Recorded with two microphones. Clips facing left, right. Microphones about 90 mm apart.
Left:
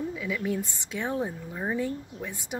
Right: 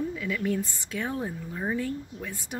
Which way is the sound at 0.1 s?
10° left (ahead or behind).